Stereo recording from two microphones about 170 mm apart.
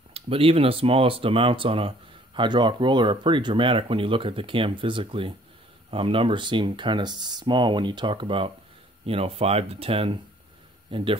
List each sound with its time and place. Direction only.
0.1 s speech: 35° right (ahead or behind)